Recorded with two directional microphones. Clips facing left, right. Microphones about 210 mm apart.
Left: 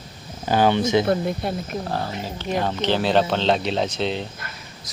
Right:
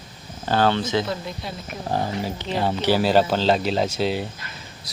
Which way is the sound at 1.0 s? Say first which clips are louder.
Left 8 dB; 55° left (ahead or behind).